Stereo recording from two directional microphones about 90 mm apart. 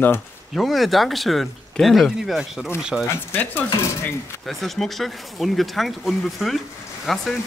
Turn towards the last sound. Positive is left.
turn(degrees=0)  # may be behind; listen again after turning